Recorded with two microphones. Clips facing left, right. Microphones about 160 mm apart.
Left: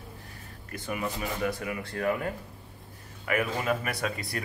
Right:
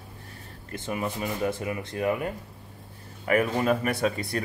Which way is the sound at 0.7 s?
25° right (ahead or behind).